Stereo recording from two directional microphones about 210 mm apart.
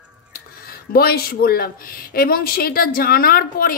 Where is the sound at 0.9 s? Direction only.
45° left (ahead or behind).